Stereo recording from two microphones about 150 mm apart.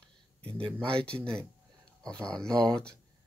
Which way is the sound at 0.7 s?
5° left (ahead or behind).